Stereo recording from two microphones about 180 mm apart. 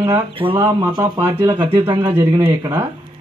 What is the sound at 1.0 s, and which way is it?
A man's voice, 15° right (ahead or behind).